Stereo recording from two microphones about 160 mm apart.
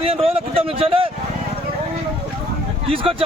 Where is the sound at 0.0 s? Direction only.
35° right (ahead or behind).